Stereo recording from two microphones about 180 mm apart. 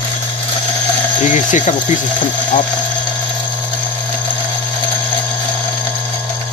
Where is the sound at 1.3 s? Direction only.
45° left (ahead or behind).